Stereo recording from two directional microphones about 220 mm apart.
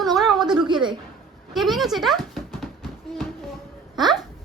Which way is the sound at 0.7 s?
20° right (ahead or behind).